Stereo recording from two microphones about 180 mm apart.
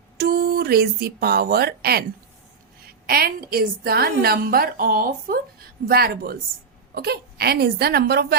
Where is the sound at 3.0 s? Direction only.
55° right (ahead or behind).